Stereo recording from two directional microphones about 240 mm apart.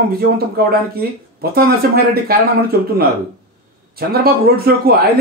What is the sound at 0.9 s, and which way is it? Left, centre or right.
Speech, right.